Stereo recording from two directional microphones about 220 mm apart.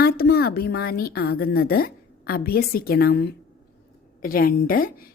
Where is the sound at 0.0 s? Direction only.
45° left (ahead or behind).